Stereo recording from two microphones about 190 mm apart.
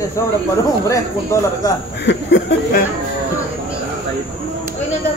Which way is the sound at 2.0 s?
70° left (ahead or behind).